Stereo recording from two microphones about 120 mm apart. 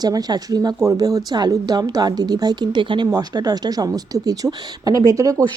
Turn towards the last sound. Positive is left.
turn(degrees=-30)  # may be behind; listen again after turning